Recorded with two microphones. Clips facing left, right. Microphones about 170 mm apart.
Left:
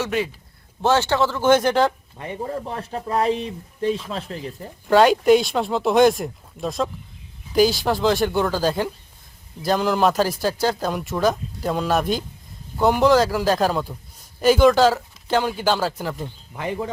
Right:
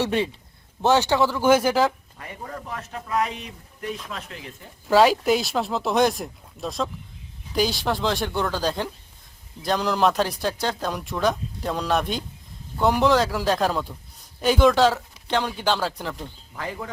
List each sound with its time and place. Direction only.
0.0 s a man's voice: 30° right (ahead or behind)
0.8 s speech: 15° right (ahead or behind)
2.1 s speech: 25° left (ahead or behind)
4.9 s a man's voice: centre (ahead or behind)
16.6 s speech: 20° left (ahead or behind)